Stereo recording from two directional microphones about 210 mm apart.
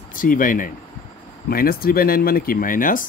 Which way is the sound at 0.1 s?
40° left (ahead or behind).